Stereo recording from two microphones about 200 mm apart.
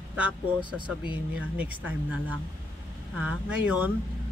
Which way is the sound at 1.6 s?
5° right (ahead or behind).